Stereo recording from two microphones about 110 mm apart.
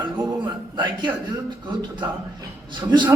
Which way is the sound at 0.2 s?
40° right (ahead or behind).